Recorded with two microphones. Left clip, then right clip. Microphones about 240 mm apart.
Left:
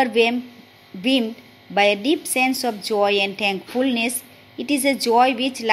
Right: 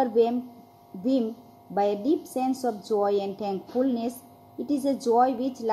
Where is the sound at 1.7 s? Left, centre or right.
Left.